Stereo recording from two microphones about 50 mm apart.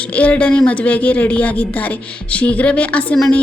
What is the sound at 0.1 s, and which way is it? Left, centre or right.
A woman's voice, left.